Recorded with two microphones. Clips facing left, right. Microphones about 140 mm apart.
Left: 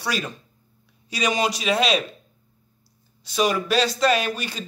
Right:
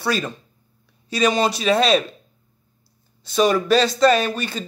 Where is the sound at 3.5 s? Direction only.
10° left (ahead or behind).